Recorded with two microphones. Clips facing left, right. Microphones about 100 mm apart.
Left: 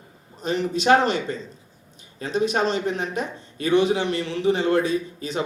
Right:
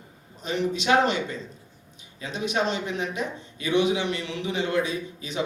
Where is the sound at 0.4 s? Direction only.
40° left (ahead or behind).